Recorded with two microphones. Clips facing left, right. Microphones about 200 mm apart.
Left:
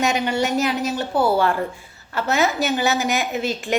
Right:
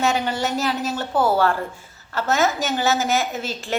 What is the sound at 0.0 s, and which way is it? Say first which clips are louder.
A woman's voice: left 1 dB; 15° left (ahead or behind).